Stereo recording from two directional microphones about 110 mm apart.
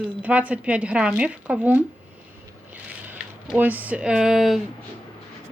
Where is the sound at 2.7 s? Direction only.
15° right (ahead or behind).